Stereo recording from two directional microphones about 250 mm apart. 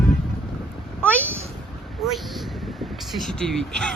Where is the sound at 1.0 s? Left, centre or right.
Centre.